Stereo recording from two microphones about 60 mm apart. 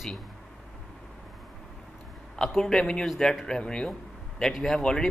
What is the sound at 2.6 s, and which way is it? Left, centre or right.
Speech, centre.